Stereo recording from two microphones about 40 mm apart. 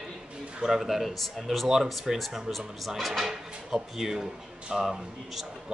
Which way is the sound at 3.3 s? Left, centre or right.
Centre.